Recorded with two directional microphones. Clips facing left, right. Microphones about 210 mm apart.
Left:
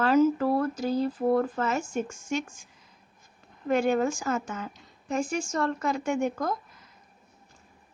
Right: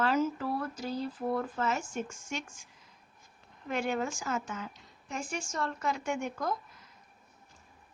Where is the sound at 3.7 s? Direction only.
45° left (ahead or behind).